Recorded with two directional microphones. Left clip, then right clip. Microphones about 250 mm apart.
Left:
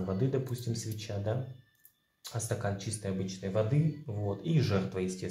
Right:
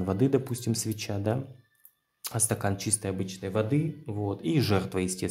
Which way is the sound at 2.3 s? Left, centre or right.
Right.